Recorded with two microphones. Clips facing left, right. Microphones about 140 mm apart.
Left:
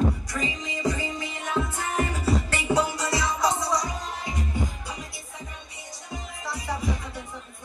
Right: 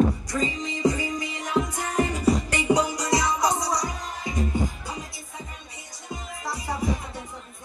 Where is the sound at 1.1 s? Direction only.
15° right (ahead or behind).